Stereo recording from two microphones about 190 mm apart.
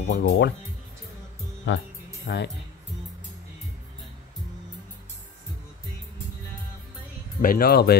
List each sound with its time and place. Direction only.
0.0 s speech: 60° left (ahead or behind)
1.7 s speech: 70° left (ahead or behind)
7.4 s speech: 50° left (ahead or behind)